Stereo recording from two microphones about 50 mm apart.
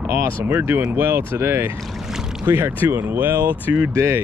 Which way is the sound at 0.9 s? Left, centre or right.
Right.